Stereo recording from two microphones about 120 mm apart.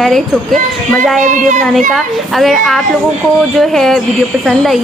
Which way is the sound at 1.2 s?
90° right.